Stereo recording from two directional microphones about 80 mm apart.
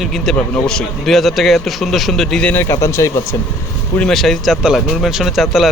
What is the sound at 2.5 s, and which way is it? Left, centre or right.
Speech, left.